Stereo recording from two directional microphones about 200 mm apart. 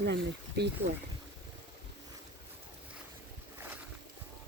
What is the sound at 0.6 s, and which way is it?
Speech, 55° right (ahead or behind).